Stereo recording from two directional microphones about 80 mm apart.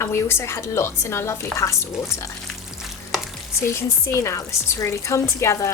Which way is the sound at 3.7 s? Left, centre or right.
Left.